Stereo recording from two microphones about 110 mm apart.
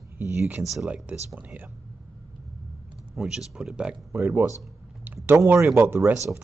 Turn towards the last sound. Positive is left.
turn(degrees=-20)  # may be behind; listen again after turning